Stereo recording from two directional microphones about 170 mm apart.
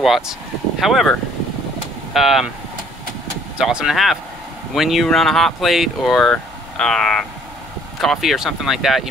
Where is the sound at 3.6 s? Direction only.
Centre (ahead or behind).